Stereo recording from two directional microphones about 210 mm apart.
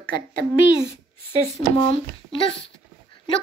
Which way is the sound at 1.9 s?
25° left (ahead or behind).